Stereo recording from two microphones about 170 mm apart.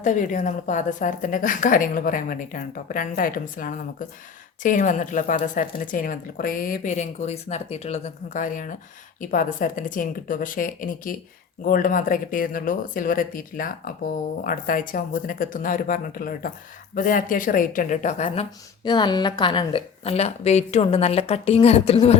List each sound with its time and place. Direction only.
0.0 s a woman's voice: 50° left (ahead or behind)
18.9 s a woman's voice: 25° left (ahead or behind)